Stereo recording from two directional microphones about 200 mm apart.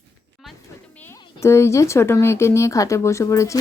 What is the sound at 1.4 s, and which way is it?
Speech, 15° left (ahead or behind).